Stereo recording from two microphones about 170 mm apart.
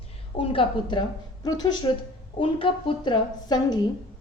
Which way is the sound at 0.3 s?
30° left (ahead or behind).